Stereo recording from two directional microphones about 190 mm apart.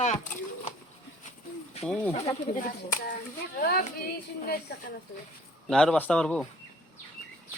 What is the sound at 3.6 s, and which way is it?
Speech, 50° left (ahead or behind).